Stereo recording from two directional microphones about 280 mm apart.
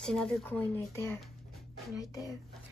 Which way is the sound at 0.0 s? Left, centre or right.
Centre.